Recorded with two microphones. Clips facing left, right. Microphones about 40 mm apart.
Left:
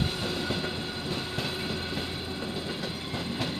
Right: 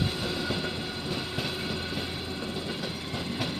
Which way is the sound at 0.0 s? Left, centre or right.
Centre.